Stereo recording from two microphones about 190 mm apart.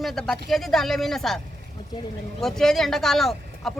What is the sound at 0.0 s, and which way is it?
Speech, centre (ahead or behind).